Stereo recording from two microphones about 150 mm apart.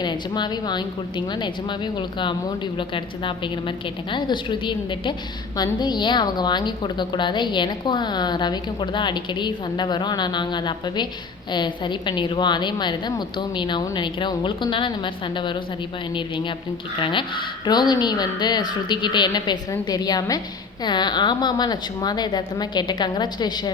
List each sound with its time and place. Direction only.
0.0 s a woman's voice: 30° left (ahead or behind)